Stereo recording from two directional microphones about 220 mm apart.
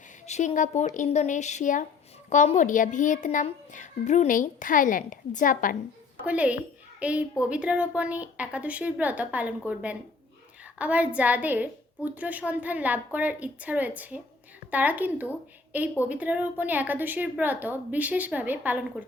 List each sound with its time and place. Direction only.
0.3 s a child's voice: 35° left (ahead or behind)
6.2 s a woman's voice: 5° right (ahead or behind)